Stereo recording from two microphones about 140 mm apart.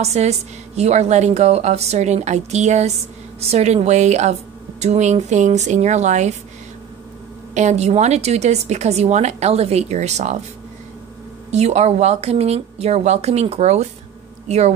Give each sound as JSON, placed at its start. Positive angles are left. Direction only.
{"t": 0.0, "sound": "a woman's voice", "side_deg": -50}
{"t": 7.5, "sound": "a woman's voice", "side_deg": -55}
{"t": 11.5, "sound": "a woman's voice", "side_deg": -50}